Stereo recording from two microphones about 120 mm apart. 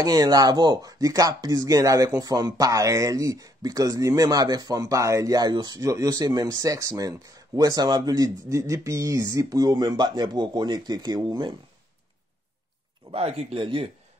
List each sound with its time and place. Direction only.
0.0 s speech: 30° right (ahead or behind)
13.1 s speech: 55° right (ahead or behind)